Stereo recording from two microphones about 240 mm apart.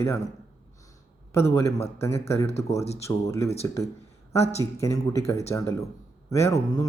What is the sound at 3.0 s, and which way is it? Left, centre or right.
Speech, centre.